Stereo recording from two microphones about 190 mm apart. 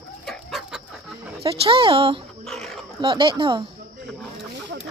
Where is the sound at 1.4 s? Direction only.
30° right (ahead or behind).